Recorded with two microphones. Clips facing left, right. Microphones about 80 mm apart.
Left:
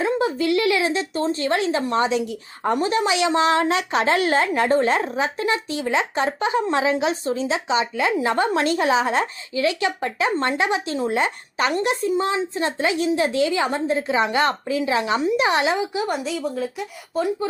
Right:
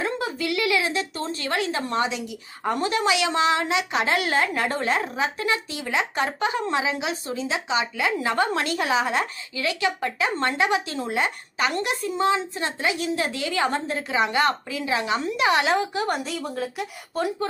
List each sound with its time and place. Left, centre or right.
0.0 s a woman's voice: left
16.1 s speech: centre